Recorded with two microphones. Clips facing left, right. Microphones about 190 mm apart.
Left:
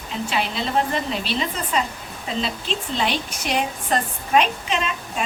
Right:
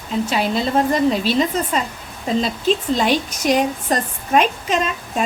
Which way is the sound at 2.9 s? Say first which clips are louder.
Right 6 dB; 45° right (ahead or behind).